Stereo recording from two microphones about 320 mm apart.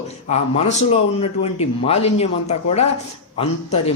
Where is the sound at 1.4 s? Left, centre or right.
Centre.